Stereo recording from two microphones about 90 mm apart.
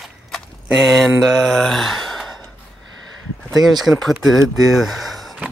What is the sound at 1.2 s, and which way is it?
Speech, centre (ahead or behind).